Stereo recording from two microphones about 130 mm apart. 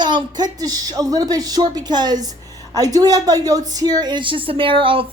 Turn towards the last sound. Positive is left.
turn(degrees=-40)  # may be behind; listen again after turning